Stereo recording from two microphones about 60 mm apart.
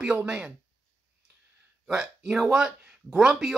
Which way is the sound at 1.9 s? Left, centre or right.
Centre.